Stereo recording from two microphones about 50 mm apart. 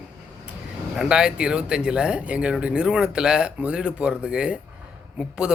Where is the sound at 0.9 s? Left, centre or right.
Centre.